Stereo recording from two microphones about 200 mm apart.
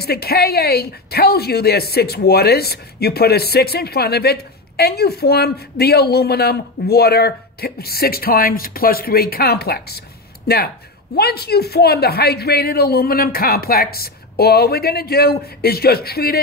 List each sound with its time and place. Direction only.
0.0 s a woman's voice: 50° left (ahead or behind)